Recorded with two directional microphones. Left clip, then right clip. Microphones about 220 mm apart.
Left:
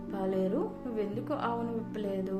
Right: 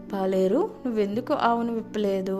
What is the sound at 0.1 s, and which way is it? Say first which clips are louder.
A woman's voice: right 8 dB; 45° right (ahead or behind).